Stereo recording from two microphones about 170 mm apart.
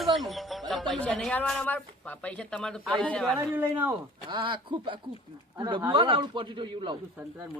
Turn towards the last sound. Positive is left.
turn(degrees=-30)  # may be behind; listen again after turning